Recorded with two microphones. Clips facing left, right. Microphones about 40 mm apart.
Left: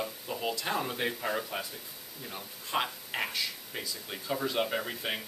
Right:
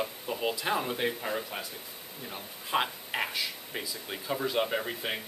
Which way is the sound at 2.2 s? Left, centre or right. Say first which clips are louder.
Right 1 dB; centre.